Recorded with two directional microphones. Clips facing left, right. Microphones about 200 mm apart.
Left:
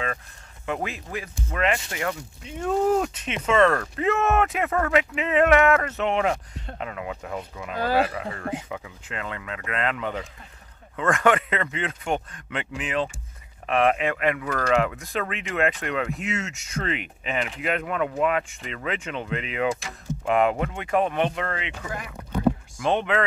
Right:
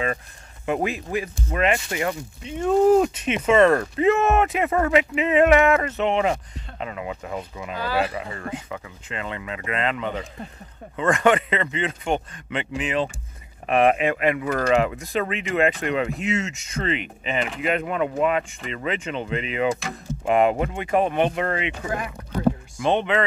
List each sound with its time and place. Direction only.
0.8 s speech: 10° right (ahead or behind)
7.7 s speech: 45° left (ahead or behind)
8.1 s speech: 5° right (ahead or behind)
13.7 s speech: 10° right (ahead or behind)
21.5 s speech: 15° right (ahead or behind)
22.8 s speech: centre (ahead or behind)